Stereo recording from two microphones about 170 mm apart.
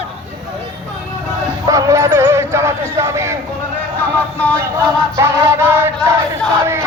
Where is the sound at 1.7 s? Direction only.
20° right (ahead or behind).